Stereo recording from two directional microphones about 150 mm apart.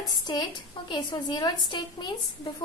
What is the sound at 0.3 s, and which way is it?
A woman's voice, 25° left (ahead or behind).